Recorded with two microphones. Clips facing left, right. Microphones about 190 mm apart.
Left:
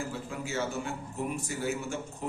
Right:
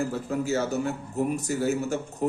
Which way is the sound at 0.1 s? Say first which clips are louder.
Right 9 dB; 40° right (ahead or behind).